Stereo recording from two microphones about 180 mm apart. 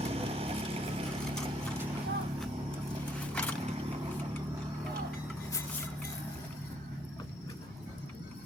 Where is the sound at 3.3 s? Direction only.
5° left (ahead or behind).